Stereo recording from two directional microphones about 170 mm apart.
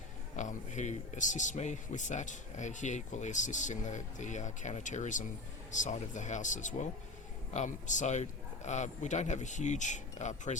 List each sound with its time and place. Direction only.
0.3 s speech: 45° left (ahead or behind)